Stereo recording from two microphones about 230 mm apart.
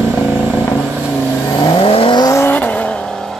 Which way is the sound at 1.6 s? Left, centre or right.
Left.